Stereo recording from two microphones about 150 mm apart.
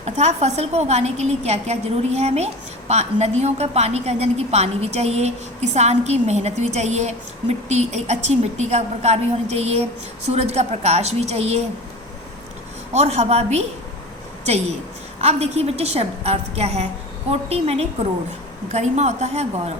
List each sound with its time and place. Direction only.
0.0 s a woman's voice: 45° right (ahead or behind)
12.9 s a woman's voice: 45° right (ahead or behind)